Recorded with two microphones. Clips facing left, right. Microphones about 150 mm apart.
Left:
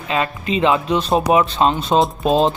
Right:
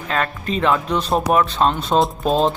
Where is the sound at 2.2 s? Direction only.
20° left (ahead or behind).